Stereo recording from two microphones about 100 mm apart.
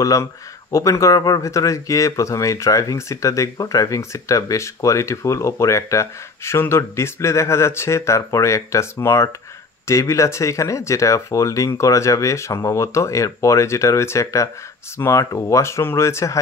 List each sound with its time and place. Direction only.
0.0 s speech: 35° left (ahead or behind)